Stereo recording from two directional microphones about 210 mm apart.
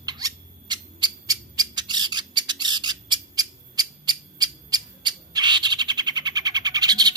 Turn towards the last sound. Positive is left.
turn(degrees=-20)  # may be behind; listen again after turning